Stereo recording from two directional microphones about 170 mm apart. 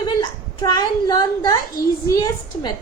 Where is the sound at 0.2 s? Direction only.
25° left (ahead or behind).